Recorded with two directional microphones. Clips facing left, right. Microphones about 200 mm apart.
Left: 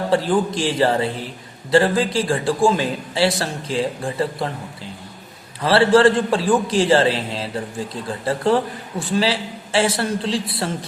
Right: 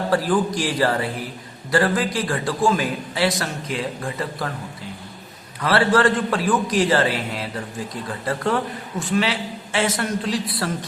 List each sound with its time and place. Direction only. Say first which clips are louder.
0.1 s a man's voice: left 2 dB; 25° left (ahead or behind)
5.5 s a man's voice: left 4 dB; 30° left (ahead or behind)